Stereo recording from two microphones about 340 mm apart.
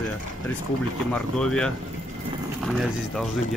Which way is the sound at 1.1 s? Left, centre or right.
Centre.